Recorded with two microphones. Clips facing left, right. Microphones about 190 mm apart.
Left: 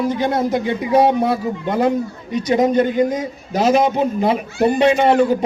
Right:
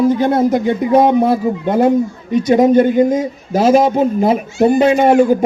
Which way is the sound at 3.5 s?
45° right (ahead or behind).